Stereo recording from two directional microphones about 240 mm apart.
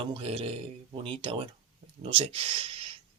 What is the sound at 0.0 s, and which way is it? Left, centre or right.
Speech, right.